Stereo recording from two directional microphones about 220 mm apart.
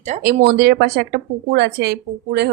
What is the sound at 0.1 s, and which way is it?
Speech, 30° right (ahead or behind).